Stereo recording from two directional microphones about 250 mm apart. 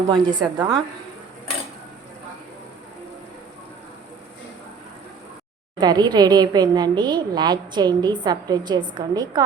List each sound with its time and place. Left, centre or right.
0.1 s a woman's voice: centre
5.8 s a woman's voice: centre